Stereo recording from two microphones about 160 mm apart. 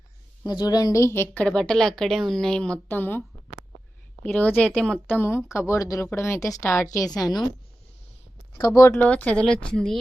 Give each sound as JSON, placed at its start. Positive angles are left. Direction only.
{"t": 0.4, "sound": "a woman's voice", "side_deg": 25}
{"t": 8.5, "sound": "a woman's voice", "side_deg": 20}